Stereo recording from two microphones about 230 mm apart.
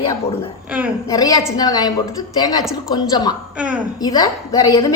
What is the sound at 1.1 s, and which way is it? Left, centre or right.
A woman's voice, centre.